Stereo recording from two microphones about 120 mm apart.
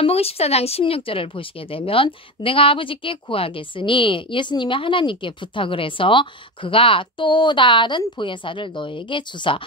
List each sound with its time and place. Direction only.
0.0 s speech: 55° left (ahead or behind)